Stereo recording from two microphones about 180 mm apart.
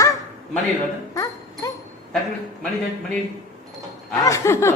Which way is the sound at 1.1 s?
20° left (ahead or behind).